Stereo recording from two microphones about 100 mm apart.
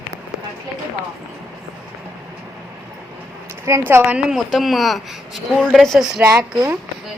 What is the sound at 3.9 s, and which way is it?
Speech, 25° right (ahead or behind).